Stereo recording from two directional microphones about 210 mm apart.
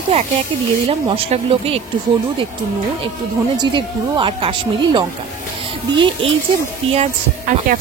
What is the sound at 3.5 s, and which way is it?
Speech, 25° right (ahead or behind).